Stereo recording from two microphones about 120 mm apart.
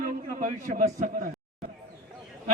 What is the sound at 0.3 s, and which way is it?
Speech, 90° right.